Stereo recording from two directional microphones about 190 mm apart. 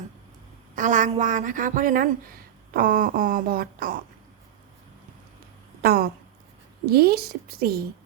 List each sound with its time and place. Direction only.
0.8 s a woman's voice: 40° right (ahead or behind)
5.8 s a woman's voice: 55° right (ahead or behind)